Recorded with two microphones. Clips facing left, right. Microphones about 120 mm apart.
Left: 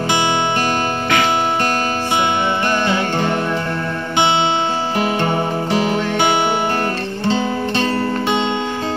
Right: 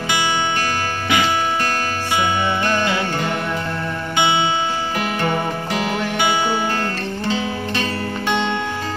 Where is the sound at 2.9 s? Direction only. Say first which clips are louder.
Left 3 dB; 30° left (ahead or behind).